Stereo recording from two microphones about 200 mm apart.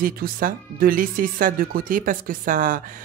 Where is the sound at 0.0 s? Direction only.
45° right (ahead or behind).